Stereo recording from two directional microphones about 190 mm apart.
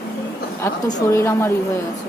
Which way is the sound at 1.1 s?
15° left (ahead or behind).